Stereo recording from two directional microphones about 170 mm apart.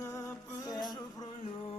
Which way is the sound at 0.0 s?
15° left (ahead or behind).